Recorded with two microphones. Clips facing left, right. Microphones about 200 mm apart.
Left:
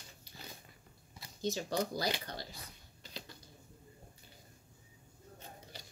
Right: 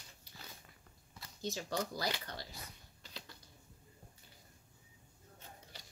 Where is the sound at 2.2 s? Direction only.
35° left (ahead or behind).